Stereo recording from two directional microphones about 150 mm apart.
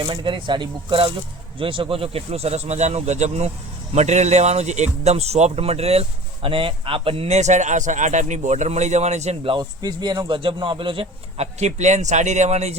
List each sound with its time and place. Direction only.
0.0 s speech: 35° right (ahead or behind)